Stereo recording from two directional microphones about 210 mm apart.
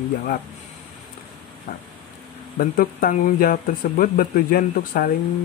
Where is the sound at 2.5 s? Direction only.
45° left (ahead or behind).